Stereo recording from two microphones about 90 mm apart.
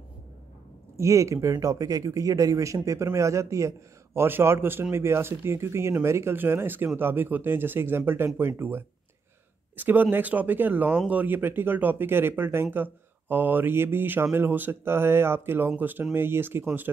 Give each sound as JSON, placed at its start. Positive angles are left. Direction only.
{"t": 0.9, "sound": "speech", "side_deg": -35}